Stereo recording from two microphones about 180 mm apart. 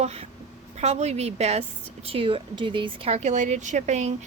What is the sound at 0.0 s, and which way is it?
A woman's voice, 35° right (ahead or behind).